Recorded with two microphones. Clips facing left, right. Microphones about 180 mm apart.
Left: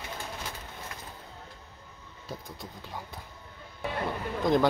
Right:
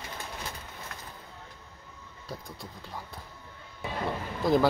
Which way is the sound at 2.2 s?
Centre (ahead or behind).